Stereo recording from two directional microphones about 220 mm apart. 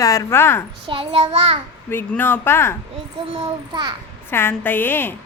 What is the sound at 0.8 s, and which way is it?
Child singing, 25° right (ahead or behind).